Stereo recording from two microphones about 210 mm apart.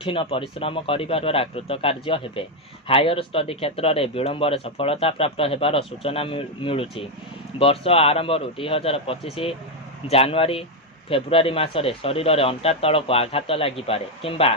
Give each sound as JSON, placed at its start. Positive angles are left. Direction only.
{"t": 0.0, "sound": "speech", "side_deg": 25}